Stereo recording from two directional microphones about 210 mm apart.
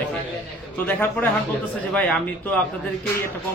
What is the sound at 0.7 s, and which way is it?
Speech, 10° left (ahead or behind).